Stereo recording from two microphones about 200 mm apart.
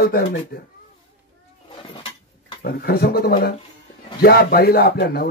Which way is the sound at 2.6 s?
50° left (ahead or behind).